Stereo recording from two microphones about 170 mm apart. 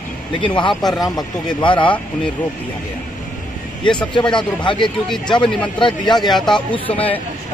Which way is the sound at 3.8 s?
30° left (ahead or behind).